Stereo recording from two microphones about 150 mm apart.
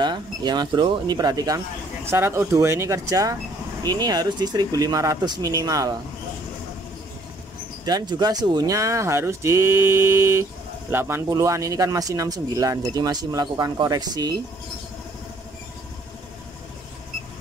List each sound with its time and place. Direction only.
0.0 s a man's voice: 30° right (ahead or behind)
7.8 s a man's voice: 25° right (ahead or behind)